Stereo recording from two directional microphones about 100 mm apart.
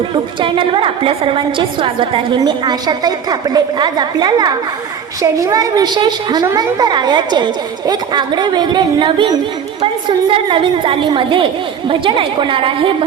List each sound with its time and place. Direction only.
0.1 s a woman's voice: 55° right (ahead or behind)
2.4 s a woman's voice: 45° right (ahead or behind); by 13.1 s 60° right (ahead or behind)